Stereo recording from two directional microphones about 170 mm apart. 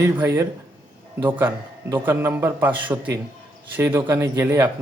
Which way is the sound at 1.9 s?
10° right (ahead or behind).